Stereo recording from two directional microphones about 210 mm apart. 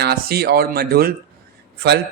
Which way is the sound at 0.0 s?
50° right (ahead or behind).